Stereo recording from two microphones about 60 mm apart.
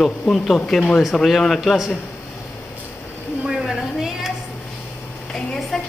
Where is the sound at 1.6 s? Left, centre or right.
Centre.